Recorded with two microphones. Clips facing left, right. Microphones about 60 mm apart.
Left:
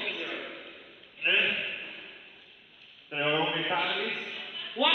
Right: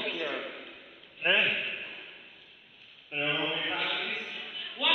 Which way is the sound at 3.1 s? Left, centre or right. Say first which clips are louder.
Left 3 dB; left.